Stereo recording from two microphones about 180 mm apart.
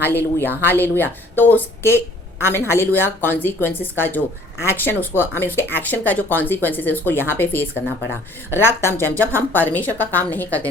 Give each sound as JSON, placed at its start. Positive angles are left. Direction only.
{"t": 0.1, "sound": "a woman's voice", "side_deg": 10}